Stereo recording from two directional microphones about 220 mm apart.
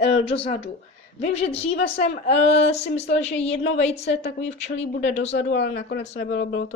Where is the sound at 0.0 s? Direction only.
25° left (ahead or behind).